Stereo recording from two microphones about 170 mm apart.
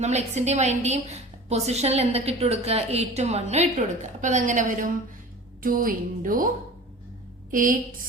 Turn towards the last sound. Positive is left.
turn(degrees=-55)  # may be behind; listen again after turning